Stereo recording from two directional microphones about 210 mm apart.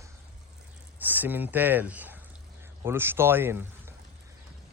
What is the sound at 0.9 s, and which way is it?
Speech, 10° right (ahead or behind).